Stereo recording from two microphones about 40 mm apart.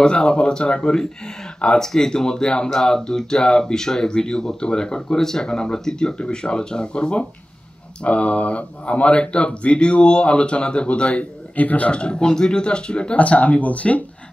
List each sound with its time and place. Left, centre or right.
0.0 s speech: left
11.5 s a man's voice: left
11.9 s speech: left